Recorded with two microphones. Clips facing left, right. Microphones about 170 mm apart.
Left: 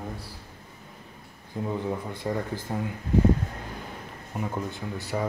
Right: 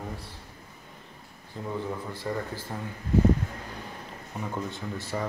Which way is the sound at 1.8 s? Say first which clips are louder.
Left 3 dB; 20° left (ahead or behind).